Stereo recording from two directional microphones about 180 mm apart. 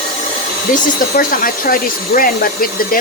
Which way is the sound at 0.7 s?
50° left (ahead or behind).